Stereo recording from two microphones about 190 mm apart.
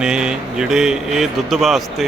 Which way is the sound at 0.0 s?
5° right (ahead or behind).